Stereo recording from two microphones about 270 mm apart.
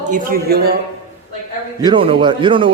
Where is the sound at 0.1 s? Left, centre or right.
Right.